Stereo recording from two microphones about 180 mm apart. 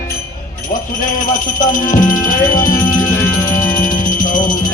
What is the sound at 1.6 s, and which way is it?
Speech, 50° left (ahead or behind).